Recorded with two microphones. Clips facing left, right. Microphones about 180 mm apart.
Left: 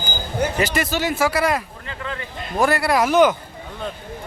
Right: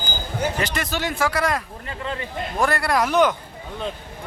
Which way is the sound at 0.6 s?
5° left (ahead or behind).